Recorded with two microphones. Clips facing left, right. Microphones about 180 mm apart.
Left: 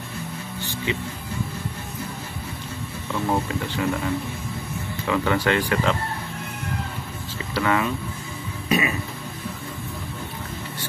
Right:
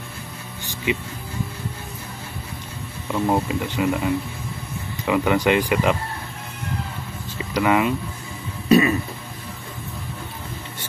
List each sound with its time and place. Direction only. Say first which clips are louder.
0.9 s speech: right 4 dB; 15° right (ahead or behind)
3.3 s speech: right 2 dB; 15° right (ahead or behind)
7.5 s speech: right 4 dB; 15° right (ahead or behind)
8.6 s a sound: right 7 dB; 40° right (ahead or behind)